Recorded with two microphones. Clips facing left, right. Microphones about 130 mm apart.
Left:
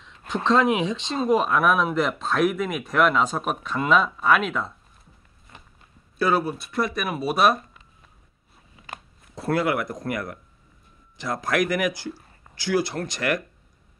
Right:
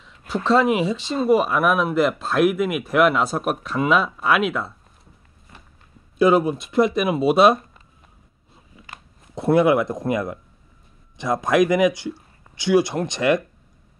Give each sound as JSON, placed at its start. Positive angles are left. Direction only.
{"t": 0.5, "sound": "speech", "side_deg": -5}
{"t": 5.5, "sound": "walk", "side_deg": 20}
{"t": 6.1, "sound": "speech", "side_deg": -20}
{"t": 9.3, "sound": "speech", "side_deg": -20}